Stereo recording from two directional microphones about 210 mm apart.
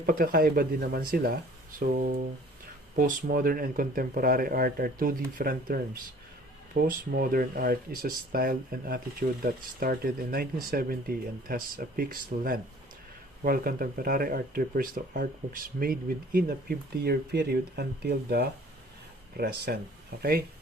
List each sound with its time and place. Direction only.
0.0 s speech: 45° right (ahead or behind)
6.8 s speech: 45° right (ahead or behind)